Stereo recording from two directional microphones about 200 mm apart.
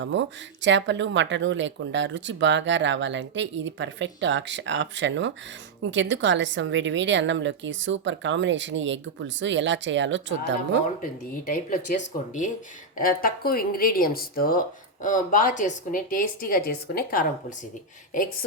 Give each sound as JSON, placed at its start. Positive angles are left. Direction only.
{"t": 0.0, "sound": "speech", "side_deg": -65}
{"t": 11.0, "sound": "speech", "side_deg": 45}